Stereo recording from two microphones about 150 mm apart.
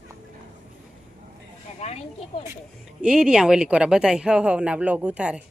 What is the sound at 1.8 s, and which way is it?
Snake, 45° left (ahead or behind).